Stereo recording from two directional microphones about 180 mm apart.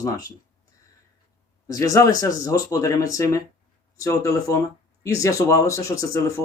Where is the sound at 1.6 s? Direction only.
20° left (ahead or behind).